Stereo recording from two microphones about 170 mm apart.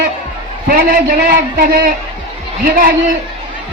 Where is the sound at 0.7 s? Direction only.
60° right (ahead or behind).